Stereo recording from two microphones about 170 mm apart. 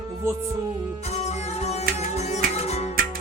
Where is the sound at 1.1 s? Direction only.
40° left (ahead or behind).